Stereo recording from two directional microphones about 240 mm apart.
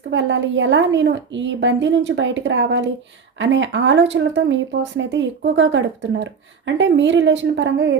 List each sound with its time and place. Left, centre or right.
0.1 s speech: right